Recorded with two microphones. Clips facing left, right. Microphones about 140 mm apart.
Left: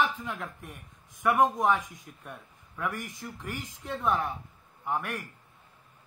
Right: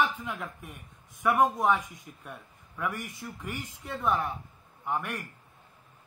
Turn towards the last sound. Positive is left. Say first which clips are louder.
# even
turn(degrees=0)  # may be behind; listen again after turning